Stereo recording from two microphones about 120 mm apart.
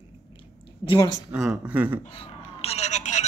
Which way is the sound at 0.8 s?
45° left (ahead or behind).